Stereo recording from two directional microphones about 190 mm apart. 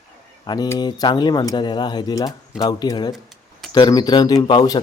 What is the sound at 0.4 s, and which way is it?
Speech, 20° left (ahead or behind).